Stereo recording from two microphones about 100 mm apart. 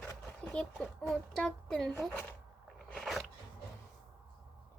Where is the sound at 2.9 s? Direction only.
5° left (ahead or behind).